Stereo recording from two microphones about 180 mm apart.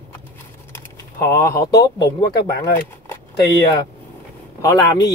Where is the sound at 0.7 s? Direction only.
20° left (ahead or behind).